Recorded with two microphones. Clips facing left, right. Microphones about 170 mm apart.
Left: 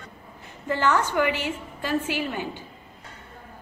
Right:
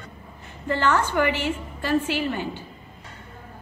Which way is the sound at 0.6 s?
10° left (ahead or behind).